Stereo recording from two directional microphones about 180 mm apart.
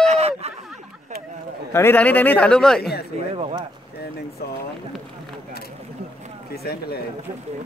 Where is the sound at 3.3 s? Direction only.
30° right (ahead or behind).